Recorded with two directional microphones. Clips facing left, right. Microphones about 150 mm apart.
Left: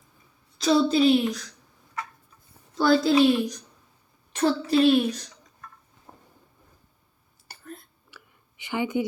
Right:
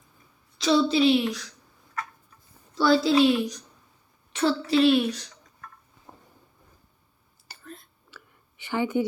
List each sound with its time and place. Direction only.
0.6 s a woman's voice: 45° left (ahead or behind)
2.7 s a woman's voice: 50° left (ahead or behind)
7.4 s whispering: 50° left (ahead or behind)
8.1 s a sound: 15° left (ahead or behind)